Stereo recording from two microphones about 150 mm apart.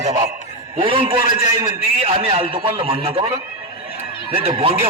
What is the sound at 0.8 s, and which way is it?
A man's voice, 40° right (ahead or behind).